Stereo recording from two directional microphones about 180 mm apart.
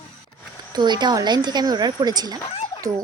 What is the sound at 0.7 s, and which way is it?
Speech, 25° right (ahead or behind).